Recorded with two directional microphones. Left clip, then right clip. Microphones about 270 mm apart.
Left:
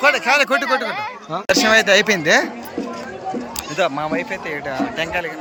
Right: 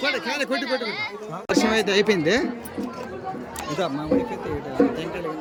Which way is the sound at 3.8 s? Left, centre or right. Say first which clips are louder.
Left 8 dB; centre.